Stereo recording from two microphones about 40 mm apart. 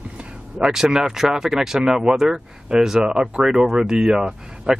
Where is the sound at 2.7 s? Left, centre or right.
Right.